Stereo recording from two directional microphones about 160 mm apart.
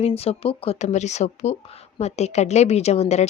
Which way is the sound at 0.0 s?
40° left (ahead or behind).